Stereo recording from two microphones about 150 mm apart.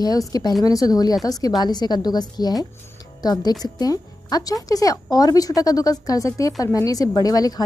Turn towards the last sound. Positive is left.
turn(degrees=25)  # may be behind; listen again after turning